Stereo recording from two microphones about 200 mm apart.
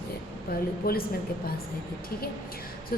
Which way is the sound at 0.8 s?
50° left (ahead or behind).